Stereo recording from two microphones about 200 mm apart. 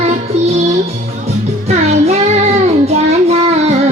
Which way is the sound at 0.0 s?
35° right (ahead or behind).